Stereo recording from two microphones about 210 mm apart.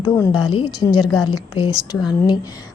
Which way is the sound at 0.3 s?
20° left (ahead or behind).